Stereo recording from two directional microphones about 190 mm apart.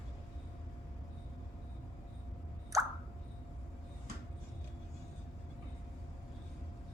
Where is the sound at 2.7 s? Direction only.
15° right (ahead or behind).